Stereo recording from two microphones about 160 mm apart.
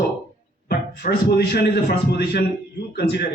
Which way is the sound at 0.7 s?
80° left.